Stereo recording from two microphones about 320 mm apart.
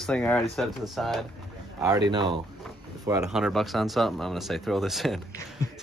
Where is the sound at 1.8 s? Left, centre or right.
Centre.